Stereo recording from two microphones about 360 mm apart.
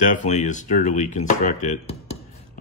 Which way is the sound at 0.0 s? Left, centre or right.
Left.